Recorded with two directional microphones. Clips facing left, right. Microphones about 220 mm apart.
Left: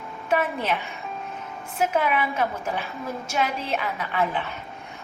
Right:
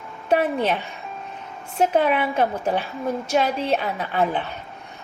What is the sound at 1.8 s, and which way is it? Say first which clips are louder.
A woman's voice: right 4 dB; 30° right (ahead or behind).